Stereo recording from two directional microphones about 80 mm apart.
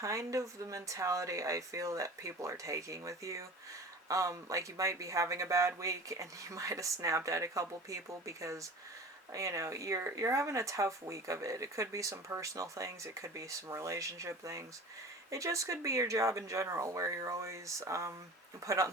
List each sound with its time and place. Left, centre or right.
0.0 s speech: right